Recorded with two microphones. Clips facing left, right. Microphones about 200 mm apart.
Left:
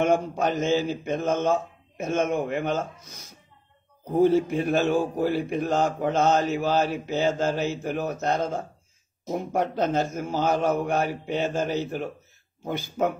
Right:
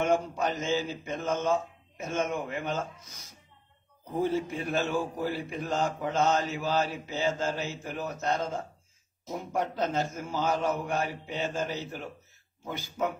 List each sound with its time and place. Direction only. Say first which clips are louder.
0.0 s speech: left 4 dB; 60° left (ahead or behind)
4.2 s speech: left 9 dB; 65° left (ahead or behind)